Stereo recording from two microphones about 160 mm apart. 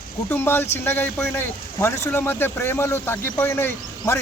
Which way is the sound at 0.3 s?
15° left (ahead or behind).